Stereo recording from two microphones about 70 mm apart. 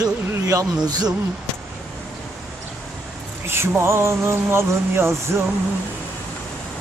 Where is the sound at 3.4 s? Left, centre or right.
Right.